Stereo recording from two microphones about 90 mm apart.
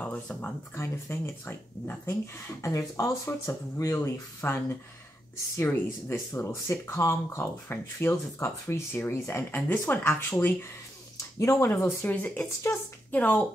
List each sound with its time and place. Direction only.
0.0 s a sound: 15° left (ahead or behind)
0.7 s speech: 25° left (ahead or behind)
5.6 s speech: 30° left (ahead or behind)
11.3 s speech: 30° left (ahead or behind)